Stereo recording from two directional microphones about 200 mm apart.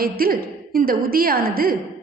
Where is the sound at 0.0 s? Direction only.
45° right (ahead or behind).